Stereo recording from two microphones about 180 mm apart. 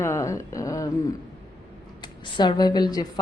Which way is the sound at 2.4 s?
25° left (ahead or behind).